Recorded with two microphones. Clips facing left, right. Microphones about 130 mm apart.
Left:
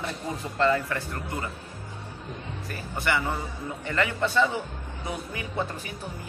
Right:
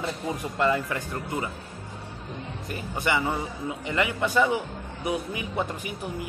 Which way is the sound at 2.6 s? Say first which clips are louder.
Right 1 dB; 20° right (ahead or behind).